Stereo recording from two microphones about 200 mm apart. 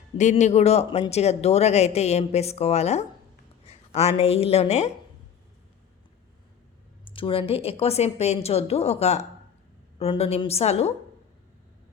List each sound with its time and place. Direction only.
0.2 s speech: 35° left (ahead or behind)
7.0 s speech: 25° left (ahead or behind)